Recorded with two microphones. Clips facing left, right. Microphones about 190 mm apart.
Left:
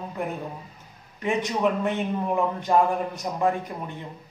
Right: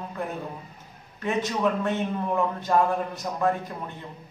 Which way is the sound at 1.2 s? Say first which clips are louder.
Left 1 dB; 15° left (ahead or behind).